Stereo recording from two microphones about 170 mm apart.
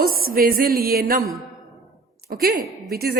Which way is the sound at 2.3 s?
60° right (ahead or behind).